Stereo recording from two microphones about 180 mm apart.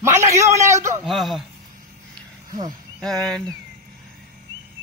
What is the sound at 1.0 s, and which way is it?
Speech, centre (ahead or behind).